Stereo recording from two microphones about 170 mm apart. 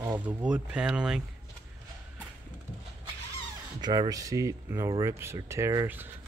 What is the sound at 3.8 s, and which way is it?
Speech, 25° right (ahead or behind).